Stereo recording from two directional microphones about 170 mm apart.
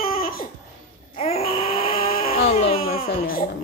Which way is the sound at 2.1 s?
60° left (ahead or behind).